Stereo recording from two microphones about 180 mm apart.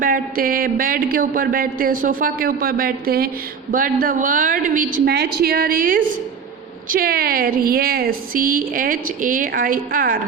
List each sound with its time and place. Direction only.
0.0 s speech: 50° right (ahead or behind)
5.1 s a woman's voice: 65° right (ahead or behind)